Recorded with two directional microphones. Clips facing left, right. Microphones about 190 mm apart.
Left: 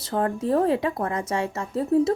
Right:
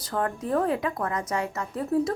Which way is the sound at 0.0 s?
25° left (ahead or behind).